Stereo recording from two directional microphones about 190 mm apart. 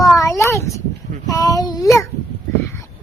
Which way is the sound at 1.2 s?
20° left (ahead or behind).